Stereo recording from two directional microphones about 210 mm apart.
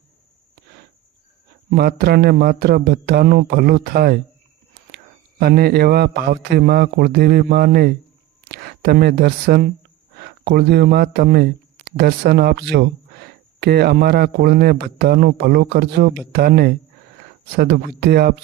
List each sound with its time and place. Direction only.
1.7 s speech: 50° right (ahead or behind)
5.4 s speech: 45° right (ahead or behind)